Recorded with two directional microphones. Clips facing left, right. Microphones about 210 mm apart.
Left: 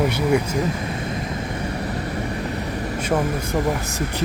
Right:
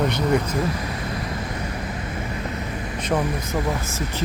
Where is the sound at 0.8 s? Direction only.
25° left (ahead or behind).